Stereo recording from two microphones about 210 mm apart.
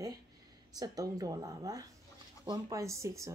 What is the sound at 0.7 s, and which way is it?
Speech, 15° right (ahead or behind).